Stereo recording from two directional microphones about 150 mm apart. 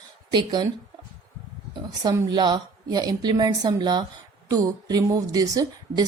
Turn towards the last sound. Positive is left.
turn(degrees=-25)  # may be behind; listen again after turning